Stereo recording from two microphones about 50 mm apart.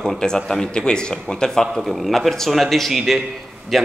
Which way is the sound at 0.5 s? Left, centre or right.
Centre.